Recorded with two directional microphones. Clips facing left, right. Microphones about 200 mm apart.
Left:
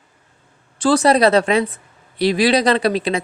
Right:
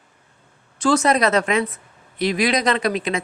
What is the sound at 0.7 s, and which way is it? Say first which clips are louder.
Speech: left 3 dB; 30° left (ahead or behind).